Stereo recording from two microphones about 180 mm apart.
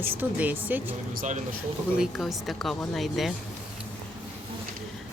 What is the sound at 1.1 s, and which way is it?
Speech, 45° right (ahead or behind).